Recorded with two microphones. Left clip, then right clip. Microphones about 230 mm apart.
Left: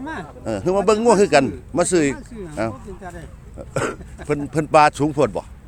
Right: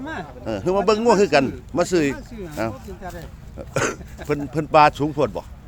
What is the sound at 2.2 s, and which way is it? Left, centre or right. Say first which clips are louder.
Speech: left 2 dB; centre.